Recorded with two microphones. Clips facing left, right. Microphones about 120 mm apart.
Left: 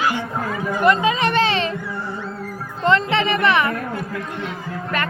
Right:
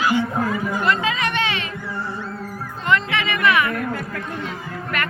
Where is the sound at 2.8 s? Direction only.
30° left (ahead or behind).